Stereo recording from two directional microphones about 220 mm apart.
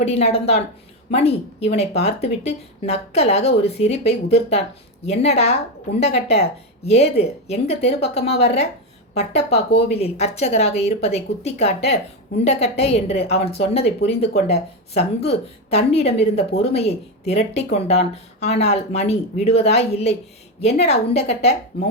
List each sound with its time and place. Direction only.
0.0 s a woman's voice: 30° left (ahead or behind)